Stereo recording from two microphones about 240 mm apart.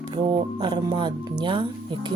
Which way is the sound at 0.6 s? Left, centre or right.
Centre.